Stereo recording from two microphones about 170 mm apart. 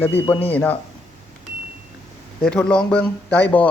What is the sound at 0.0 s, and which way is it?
Speech, 10° left (ahead or behind).